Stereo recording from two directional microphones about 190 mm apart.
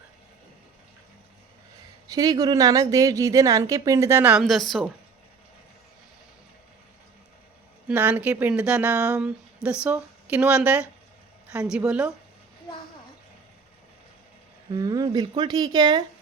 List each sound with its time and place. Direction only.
2.0 s speech: 20° right (ahead or behind); by 4.9 s centre (ahead or behind)
7.9 s speech: 10° right (ahead or behind)
14.7 s speech: 20° right (ahead or behind)